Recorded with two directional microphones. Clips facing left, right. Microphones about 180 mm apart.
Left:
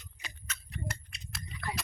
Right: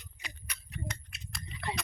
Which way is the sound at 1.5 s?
25° right (ahead or behind).